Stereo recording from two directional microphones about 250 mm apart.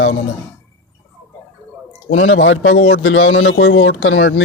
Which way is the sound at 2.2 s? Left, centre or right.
Left.